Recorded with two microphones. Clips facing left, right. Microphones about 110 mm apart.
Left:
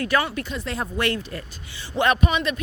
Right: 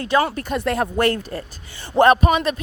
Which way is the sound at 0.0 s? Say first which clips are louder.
Right 4 dB; 30° right (ahead or behind).